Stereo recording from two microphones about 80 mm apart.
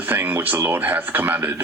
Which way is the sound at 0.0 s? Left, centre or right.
Right.